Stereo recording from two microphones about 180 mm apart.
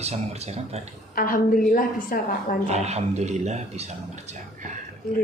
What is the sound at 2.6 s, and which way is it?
Speech, 40° right (ahead or behind).